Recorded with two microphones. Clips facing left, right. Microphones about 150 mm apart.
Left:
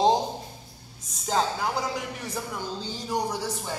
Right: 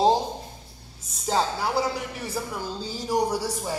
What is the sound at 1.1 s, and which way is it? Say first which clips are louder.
A man's voice: right 1 dB; centre (ahead or behind).